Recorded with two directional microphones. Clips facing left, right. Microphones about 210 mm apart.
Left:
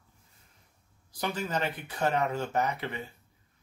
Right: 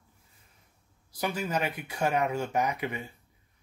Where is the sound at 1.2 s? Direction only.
10° right (ahead or behind).